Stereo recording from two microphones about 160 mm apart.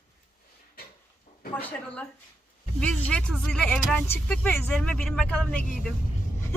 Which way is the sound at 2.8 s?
10° left (ahead or behind).